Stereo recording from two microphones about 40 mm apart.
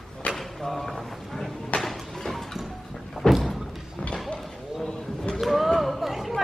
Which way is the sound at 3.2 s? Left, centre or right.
Left.